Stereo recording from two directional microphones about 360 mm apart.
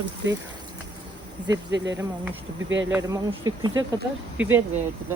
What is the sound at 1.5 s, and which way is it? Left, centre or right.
Speech, right.